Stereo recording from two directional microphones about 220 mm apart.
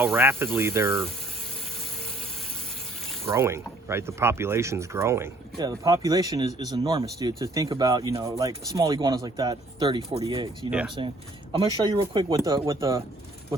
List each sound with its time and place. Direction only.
0.0 s speech: 10° right (ahead or behind)
3.2 s speech: 10° right (ahead or behind)
10.7 s speech: 5° right (ahead or behind)
11.5 s speech: 20° right (ahead or behind)